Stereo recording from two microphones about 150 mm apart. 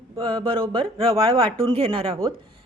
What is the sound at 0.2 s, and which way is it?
A woman's voice, 25° right (ahead or behind).